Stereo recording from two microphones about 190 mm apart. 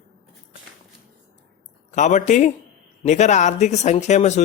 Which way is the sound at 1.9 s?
40° left (ahead or behind).